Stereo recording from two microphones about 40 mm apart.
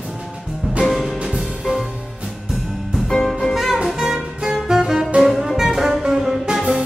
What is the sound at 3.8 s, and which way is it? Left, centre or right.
Music, centre.